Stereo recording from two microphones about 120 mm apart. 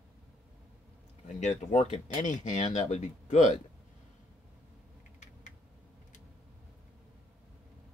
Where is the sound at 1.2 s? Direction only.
75° left (ahead or behind).